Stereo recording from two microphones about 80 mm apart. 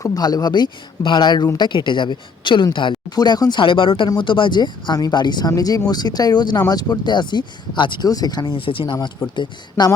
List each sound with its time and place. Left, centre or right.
0.0 s a woman's voice: left
3.2 s speech: left
3.6 s speech: left
5.5 s speech: left
8.0 s speech: left
9.3 s speech: left